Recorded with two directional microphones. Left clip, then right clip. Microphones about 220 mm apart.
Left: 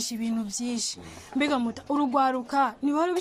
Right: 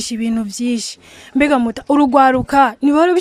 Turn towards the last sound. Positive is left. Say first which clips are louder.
# right 12 dB
turn(degrees=-40)  # may be behind; listen again after turning